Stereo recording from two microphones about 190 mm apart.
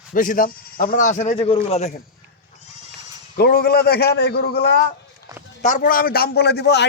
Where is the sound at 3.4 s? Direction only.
50° left (ahead or behind).